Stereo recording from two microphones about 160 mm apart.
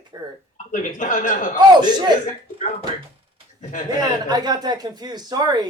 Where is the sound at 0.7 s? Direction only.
55° left (ahead or behind).